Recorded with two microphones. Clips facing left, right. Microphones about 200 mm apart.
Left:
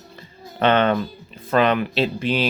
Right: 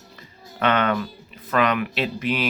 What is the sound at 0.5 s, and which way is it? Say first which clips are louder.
Speech: left 4 dB; 30° left (ahead or behind).